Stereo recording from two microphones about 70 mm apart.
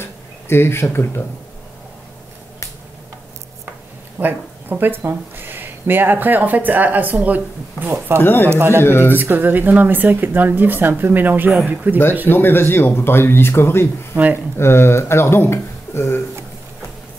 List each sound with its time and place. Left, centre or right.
0.0 s a sound: left
4.2 s speech: right
8.2 s speech: left
8.5 s speech: right
8.8 s speech: left
9.1 s speech: right
12.3 s speech: left
14.1 s speech: right
14.6 s speech: left